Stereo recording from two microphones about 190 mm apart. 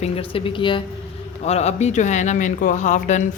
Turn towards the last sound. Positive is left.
turn(degrees=40)  # may be behind; listen again after turning